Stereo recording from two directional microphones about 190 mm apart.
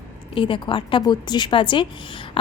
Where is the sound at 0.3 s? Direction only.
25° left (ahead or behind).